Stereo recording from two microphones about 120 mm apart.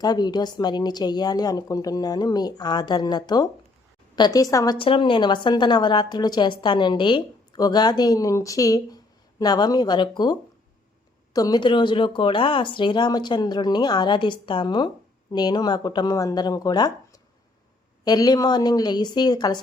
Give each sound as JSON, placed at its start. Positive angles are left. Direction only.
{"t": 0.0, "sound": "a woman's voice", "side_deg": 35}
{"t": 4.8, "sound": "a woman's voice", "side_deg": 45}
{"t": 11.3, "sound": "a woman's voice", "side_deg": 35}